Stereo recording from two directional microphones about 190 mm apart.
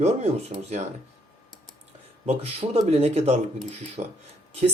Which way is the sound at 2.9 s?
35° right (ahead or behind).